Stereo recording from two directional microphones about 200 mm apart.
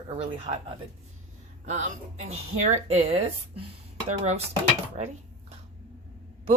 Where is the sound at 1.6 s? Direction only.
35° right (ahead or behind).